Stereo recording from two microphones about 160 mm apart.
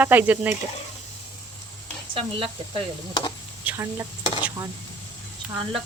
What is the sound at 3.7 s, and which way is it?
Speech, 15° right (ahead or behind).